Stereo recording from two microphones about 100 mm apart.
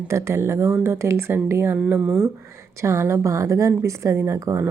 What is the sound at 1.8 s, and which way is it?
Speech, 10° right (ahead or behind).